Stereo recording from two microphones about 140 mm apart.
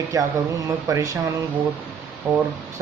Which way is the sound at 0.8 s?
25° right (ahead or behind).